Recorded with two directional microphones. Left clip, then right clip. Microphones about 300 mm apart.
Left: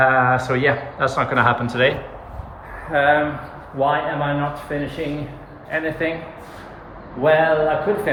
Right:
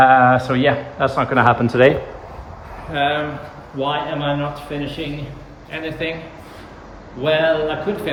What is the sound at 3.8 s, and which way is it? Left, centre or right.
Speech, centre.